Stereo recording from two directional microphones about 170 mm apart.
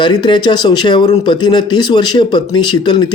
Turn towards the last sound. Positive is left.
turn(degrees=25)  # may be behind; listen again after turning